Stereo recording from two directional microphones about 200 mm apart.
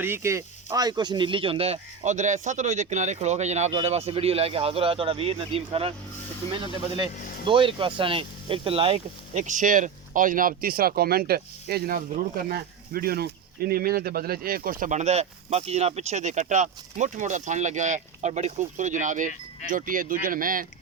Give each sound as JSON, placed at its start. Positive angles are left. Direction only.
{"t": 0.0, "sound": "speech", "side_deg": -10}
{"t": 6.9, "sound": "speech", "side_deg": -25}